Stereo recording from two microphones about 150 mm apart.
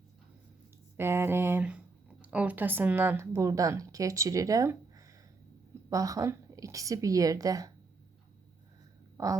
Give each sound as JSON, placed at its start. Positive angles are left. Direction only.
{"t": 0.9, "sound": "a sound", "side_deg": -15}
{"t": 2.2, "sound": "speech", "side_deg": -10}
{"t": 9.1, "sound": "speech", "side_deg": -25}